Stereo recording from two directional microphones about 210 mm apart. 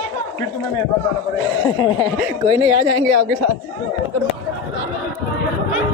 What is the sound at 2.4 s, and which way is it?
Speech, 20° right (ahead or behind).